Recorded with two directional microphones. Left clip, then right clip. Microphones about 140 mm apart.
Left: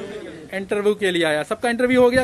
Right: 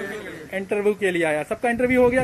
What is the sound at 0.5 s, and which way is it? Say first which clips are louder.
Speech: left 2 dB; 20° left (ahead or behind).